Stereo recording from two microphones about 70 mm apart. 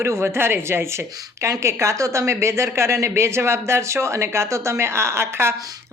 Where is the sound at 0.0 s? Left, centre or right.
Right.